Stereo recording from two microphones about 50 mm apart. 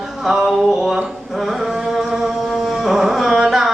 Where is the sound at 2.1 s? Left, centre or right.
Centre.